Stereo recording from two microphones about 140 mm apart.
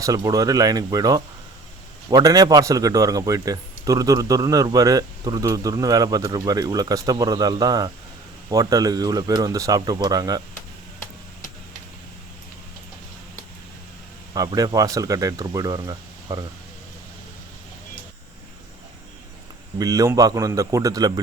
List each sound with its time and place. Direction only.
0.0 s a man's voice: 25° right (ahead or behind)
14.3 s a man's voice: 25° right (ahead or behind)
19.8 s a man's voice: 25° right (ahead or behind)